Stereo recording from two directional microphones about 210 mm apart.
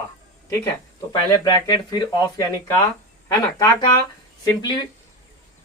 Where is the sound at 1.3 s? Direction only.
20° left (ahead or behind).